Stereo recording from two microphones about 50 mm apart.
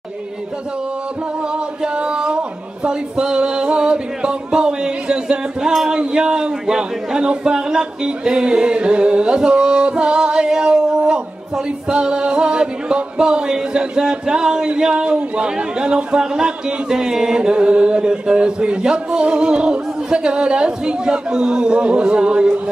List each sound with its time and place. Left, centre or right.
1.8 s a sound: centre
5.7 s music: centre
5.9 s speech: centre